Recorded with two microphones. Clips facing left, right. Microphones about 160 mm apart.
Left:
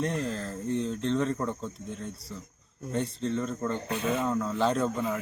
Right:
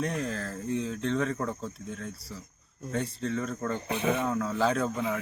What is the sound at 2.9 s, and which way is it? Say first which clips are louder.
Speech: left 1 dB; centre (ahead or behind).